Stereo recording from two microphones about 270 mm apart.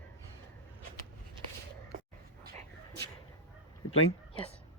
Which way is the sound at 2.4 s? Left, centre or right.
Right.